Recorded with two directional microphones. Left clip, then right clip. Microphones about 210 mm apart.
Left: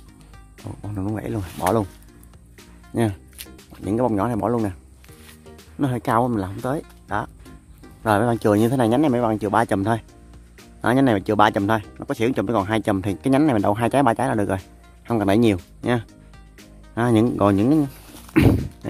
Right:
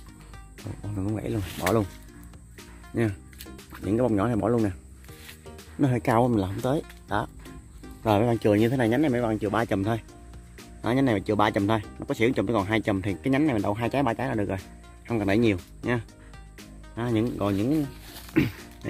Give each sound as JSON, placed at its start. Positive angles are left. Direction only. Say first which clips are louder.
{"t": 0.6, "sound": "speech", "louder": "left 4 dB", "side_deg": 0}
{"t": 1.1, "sound": "speech", "louder": "left 2 dB", "side_deg": 15}
{"t": 2.9, "sound": "speech", "louder": "left 5 dB", "side_deg": 15}
{"t": 5.4, "sound": "music", "louder": "left 1 dB", "side_deg": 0}
{"t": 8.0, "sound": "speech", "louder": "left 4 dB", "side_deg": 15}
{"t": 16.9, "sound": "speech", "louder": "left 8 dB", "side_deg": 30}